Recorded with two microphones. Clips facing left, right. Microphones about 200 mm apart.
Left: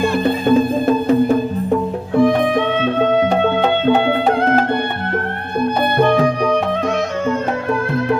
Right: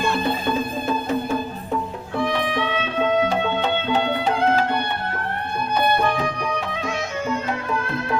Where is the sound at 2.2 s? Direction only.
50° left (ahead or behind).